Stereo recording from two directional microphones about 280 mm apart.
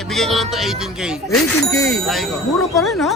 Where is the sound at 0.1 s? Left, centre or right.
Centre.